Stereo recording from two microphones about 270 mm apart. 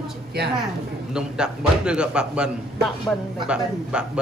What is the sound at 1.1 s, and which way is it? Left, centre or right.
A man's voice, centre.